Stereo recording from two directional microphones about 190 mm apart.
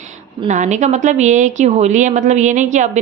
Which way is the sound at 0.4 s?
40° right (ahead or behind).